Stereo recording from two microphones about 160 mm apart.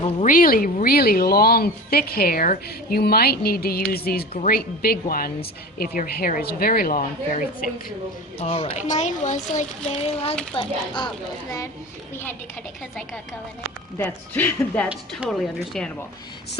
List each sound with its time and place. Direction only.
0.3 s a woman's voice: 60° left (ahead or behind)
8.4 s a woman's voice: 40° left (ahead or behind)
12.1 s speech: 15° left (ahead or behind)
14.0 s speech: 10° left (ahead or behind)